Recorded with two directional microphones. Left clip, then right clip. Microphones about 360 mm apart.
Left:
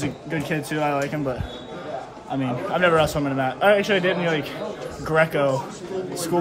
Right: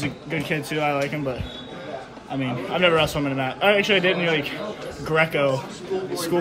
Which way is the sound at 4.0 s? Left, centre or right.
Left.